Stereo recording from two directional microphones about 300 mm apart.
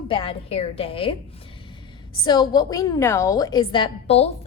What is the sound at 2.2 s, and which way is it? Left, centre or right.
A woman's voice, centre.